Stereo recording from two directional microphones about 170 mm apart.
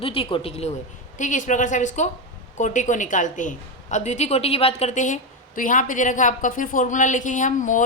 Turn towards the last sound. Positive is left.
turn(degrees=50)  # may be behind; listen again after turning